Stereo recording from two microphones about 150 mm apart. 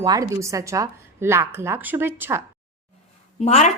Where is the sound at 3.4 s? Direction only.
50° left (ahead or behind).